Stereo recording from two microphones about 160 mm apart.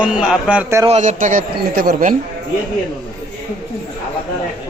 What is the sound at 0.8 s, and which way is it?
A man's voice, 45° right (ahead or behind).